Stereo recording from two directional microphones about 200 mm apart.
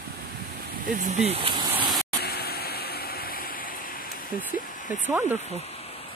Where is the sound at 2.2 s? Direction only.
50° left (ahead or behind).